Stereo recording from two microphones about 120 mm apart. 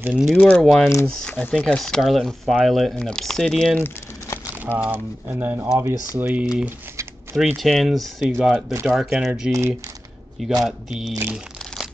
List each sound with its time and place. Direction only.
0.1 s speech: 5° right (ahead or behind)
4.6 s speech: 15° right (ahead or behind)
7.3 s speech: centre (ahead or behind)
9.5 s speech: 20° right (ahead or behind)
10.6 s speech: 5° right (ahead or behind)